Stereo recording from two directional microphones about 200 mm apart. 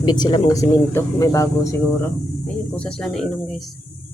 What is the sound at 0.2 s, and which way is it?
Speech, 20° left (ahead or behind).